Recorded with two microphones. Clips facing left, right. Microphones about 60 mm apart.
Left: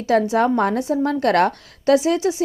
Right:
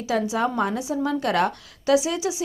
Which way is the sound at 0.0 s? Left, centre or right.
Left.